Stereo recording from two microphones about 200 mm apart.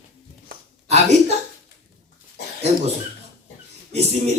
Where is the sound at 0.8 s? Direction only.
35° right (ahead or behind).